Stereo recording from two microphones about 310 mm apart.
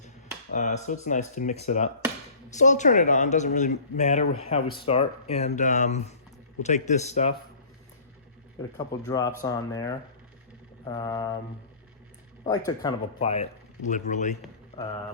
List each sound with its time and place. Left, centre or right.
0.5 s speech: left
8.9 s speech: centre
12.5 s speech: centre